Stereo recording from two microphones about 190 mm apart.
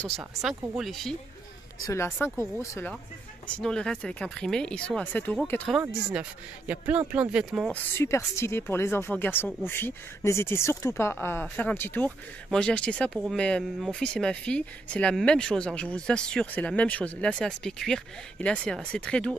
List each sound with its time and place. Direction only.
0.2 s speech: centre (ahead or behind)
1.9 s speech: 15° left (ahead or behind)
3.5 s speech: 5° left (ahead or behind)
6.7 s speech: 10° right (ahead or behind)
7.7 s speech: 15° left (ahead or behind)